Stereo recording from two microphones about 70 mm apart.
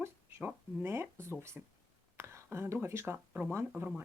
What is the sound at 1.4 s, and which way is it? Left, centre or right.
Speech, right.